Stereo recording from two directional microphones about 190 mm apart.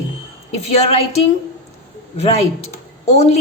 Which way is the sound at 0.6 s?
30° left (ahead or behind).